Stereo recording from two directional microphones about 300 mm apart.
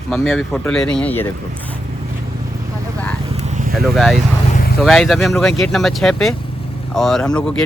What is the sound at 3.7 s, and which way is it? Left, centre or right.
Speech, centre.